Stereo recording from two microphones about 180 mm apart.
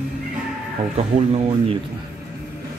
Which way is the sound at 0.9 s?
35° right (ahead or behind).